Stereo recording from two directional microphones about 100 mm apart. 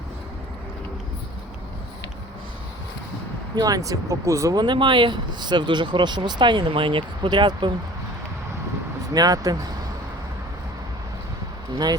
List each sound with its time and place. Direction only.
3.5 s speech: 40° right (ahead or behind)
4.6 s speech: 55° right (ahead or behind)
9.1 s speech: 40° right (ahead or behind)